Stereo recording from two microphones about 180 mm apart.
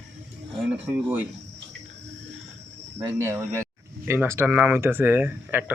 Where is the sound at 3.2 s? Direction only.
15° right (ahead or behind).